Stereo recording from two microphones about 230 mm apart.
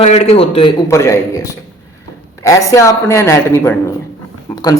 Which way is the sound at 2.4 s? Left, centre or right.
Centre.